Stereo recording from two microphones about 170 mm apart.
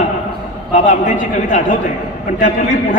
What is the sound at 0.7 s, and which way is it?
A man's voice, 50° left (ahead or behind).